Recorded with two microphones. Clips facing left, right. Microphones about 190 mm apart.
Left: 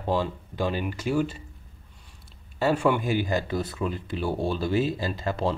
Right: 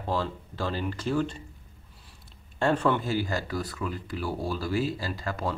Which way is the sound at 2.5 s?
5° left (ahead or behind).